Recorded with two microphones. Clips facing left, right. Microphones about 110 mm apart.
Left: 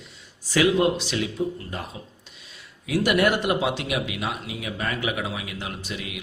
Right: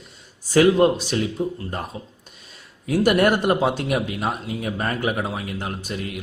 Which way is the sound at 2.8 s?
45° right (ahead or behind).